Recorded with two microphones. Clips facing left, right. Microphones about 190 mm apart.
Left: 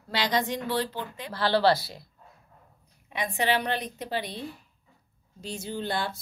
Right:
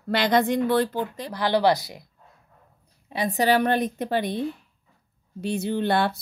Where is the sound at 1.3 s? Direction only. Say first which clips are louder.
Right 2 dB; 15° right (ahead or behind).